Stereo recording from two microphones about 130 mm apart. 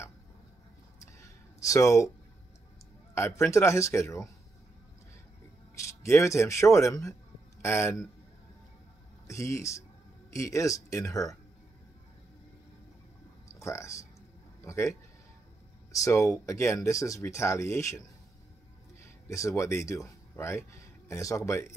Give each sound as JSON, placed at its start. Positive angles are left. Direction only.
{"t": 1.6, "sound": "speech", "side_deg": 25}
{"t": 3.2, "sound": "speech", "side_deg": 20}
{"t": 5.8, "sound": "a man's voice", "side_deg": 20}
{"t": 9.3, "sound": "speech", "side_deg": 25}
{"t": 13.6, "sound": "speech", "side_deg": 25}
{"t": 19.2, "sound": "speech", "side_deg": 25}